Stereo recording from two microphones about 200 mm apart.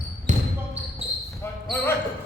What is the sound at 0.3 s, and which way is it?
Basketball bounce, 30° right (ahead or behind).